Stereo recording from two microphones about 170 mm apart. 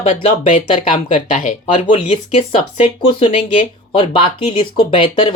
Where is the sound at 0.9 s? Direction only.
50° left (ahead or behind); by 5.3 s 30° left (ahead or behind).